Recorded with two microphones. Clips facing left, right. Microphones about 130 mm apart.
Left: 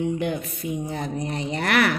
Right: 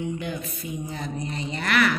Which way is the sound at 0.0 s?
60° left (ahead or behind).